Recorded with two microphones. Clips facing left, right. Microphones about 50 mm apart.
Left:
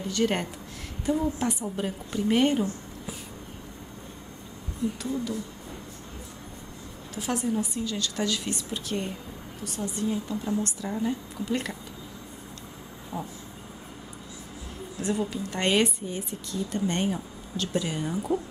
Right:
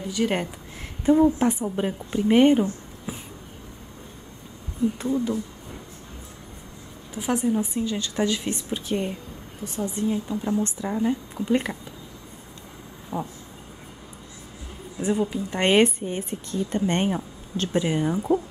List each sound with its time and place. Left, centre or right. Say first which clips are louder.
0.1 s speech: right 2 dB; centre
1.0 s a woman's voice: right 8 dB; right
5.0 s a woman's voice: right 6 dB; right
7.2 s a woman's voice: right 4 dB; centre
13.1 s a woman's voice: right 5 dB; right
15.0 s a woman's voice: right 4 dB; centre
15.7 s speech: right 6 dB; right